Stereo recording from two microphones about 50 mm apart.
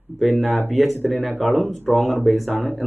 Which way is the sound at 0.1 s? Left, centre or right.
Right.